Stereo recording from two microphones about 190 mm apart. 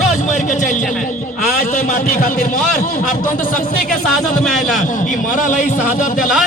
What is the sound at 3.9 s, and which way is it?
Speech, centre (ahead or behind).